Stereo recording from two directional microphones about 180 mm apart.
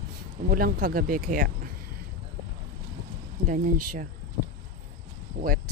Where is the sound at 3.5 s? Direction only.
50° right (ahead or behind).